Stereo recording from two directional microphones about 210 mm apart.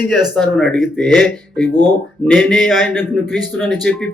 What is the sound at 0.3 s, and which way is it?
Speech, 5° left (ahead or behind).